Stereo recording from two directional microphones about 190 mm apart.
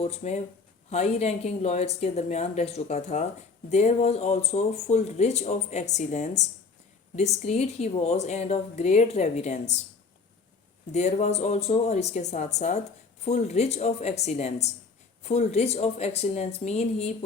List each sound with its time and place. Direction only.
0.0 s speech: 35° left (ahead or behind)
10.9 s speech: 35° left (ahead or behind)